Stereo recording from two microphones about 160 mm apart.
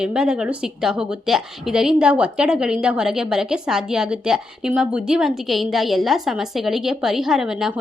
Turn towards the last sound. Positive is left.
turn(degrees=-5)  # may be behind; listen again after turning